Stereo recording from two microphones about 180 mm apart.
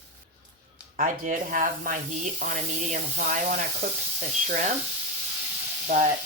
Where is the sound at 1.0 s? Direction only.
50° right (ahead or behind).